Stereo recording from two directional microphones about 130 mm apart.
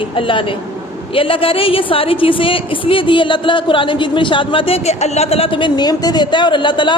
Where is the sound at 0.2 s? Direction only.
40° left (ahead or behind).